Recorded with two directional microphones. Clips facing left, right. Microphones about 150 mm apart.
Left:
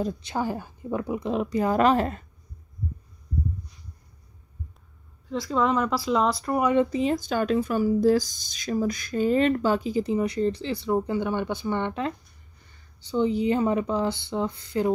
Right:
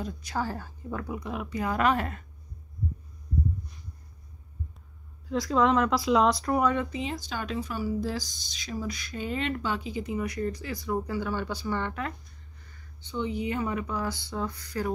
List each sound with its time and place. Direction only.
0.2 s speech: 20° left (ahead or behind)
5.3 s speech: centre (ahead or behind)
6.6 s speech: 20° left (ahead or behind)
6.9 s speech: 45° left (ahead or behind); by 12.1 s 20° left (ahead or behind)
13.0 s speech: 35° left (ahead or behind)